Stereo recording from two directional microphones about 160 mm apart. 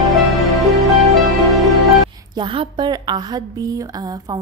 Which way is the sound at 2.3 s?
30° right (ahead or behind).